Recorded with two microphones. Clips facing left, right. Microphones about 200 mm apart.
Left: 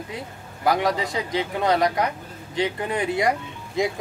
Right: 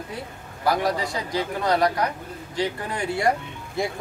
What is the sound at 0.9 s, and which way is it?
Speech, 20° left (ahead or behind).